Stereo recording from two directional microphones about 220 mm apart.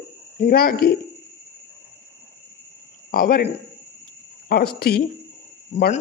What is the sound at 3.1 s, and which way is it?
A man's voice, 40° left (ahead or behind).